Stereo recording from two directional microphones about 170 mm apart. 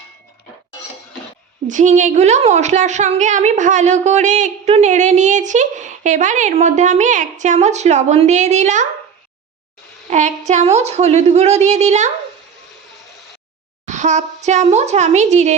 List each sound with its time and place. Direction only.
1.6 s a woman's voice: 45° right (ahead or behind)
10.1 s a woman's voice: 45° right (ahead or behind)
13.8 s a woman's voice: 45° right (ahead or behind)